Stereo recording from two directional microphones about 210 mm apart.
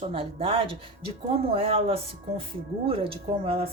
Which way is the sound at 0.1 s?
25° right (ahead or behind).